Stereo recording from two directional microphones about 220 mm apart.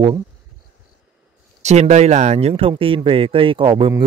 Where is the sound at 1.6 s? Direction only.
30° right (ahead or behind).